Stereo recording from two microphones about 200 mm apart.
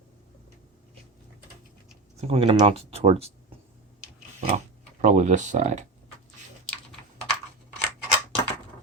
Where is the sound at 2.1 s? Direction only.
30° right (ahead or behind).